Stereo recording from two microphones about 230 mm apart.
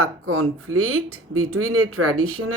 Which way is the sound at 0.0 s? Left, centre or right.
Right.